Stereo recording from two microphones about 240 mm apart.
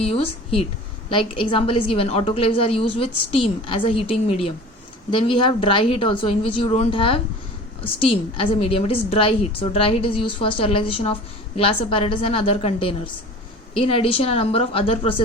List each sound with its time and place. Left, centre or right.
0.0 s a woman's voice: left